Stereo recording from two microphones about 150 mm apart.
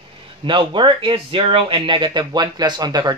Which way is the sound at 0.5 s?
35° right (ahead or behind).